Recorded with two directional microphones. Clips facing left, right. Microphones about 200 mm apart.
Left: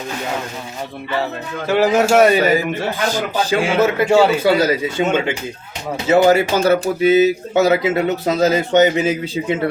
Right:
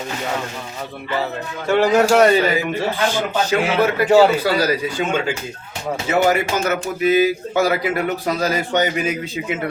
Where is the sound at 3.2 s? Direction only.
25° left (ahead or behind).